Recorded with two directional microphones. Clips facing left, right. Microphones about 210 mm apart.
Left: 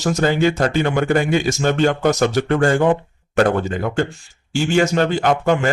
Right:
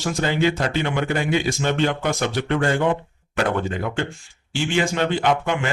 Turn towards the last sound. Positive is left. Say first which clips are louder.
# left 4 dB
turn(degrees=40)  # may be behind; listen again after turning